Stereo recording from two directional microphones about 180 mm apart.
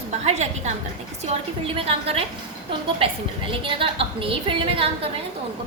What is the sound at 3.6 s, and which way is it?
A woman's voice, 30° right (ahead or behind).